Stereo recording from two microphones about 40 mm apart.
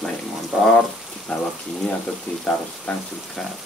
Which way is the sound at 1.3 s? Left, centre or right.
Left.